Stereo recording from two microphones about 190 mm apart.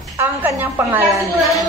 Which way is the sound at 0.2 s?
10° right (ahead or behind).